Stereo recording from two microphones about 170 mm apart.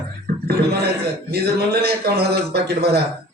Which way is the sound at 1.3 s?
70° right (ahead or behind).